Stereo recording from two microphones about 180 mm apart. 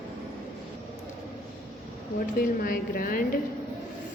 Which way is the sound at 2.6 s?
50° left (ahead or behind).